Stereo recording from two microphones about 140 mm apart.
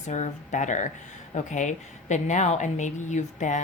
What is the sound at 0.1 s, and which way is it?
Speech, 60° left (ahead or behind).